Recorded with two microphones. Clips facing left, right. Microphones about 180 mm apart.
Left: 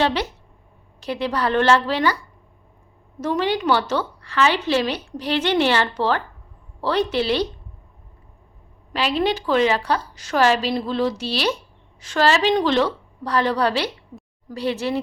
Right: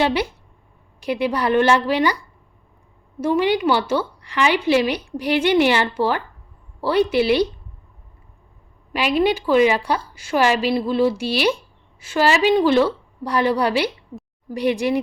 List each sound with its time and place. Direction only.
0.0 s a woman's voice: 10° right (ahead or behind)
3.2 s a woman's voice: 10° right (ahead or behind)
8.9 s a woman's voice: 10° right (ahead or behind)